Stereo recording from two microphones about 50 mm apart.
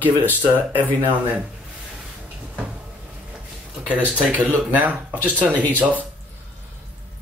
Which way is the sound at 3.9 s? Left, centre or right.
Right.